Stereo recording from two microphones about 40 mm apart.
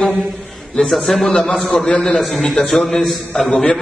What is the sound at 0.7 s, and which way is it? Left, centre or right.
A man's voice, centre.